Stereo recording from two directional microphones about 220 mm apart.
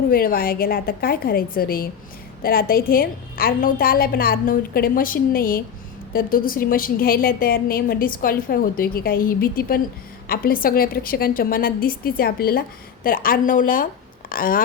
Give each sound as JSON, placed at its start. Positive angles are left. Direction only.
{"t": 0.1, "sound": "a woman's voice", "side_deg": 40}